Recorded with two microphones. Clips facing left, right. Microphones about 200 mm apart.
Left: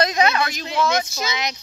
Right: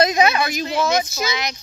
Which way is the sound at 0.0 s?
10° right (ahead or behind).